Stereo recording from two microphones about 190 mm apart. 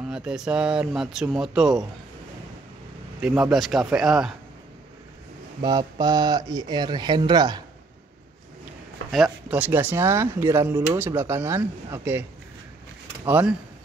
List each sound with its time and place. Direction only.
0.1 s speech: 5° right (ahead or behind)
3.2 s speech: 5° right (ahead or behind)
5.6 s speech: 20° right (ahead or behind)
9.1 s speech: 5° right (ahead or behind)